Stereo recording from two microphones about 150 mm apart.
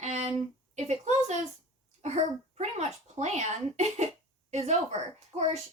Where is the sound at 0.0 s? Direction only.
50° right (ahead or behind).